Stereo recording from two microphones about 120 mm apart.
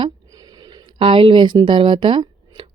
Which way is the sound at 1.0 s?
50° right (ahead or behind).